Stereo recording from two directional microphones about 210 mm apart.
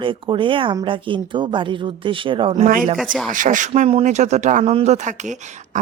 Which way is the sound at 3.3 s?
40° right (ahead or behind).